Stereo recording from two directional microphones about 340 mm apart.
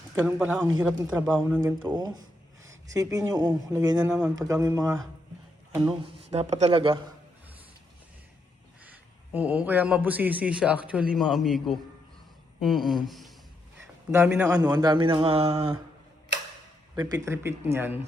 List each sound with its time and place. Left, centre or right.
0.3 s a man's voice: centre
8.8 s a man's voice: centre
16.9 s a man's voice: centre